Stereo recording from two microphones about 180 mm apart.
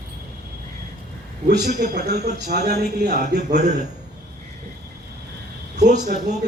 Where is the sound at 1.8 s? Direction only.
55° right (ahead or behind).